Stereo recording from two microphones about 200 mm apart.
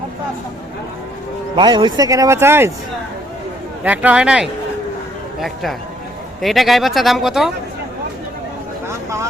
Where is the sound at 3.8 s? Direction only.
5° right (ahead or behind).